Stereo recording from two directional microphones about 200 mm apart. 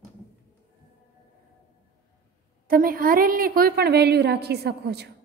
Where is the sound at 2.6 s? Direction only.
45° right (ahead or behind).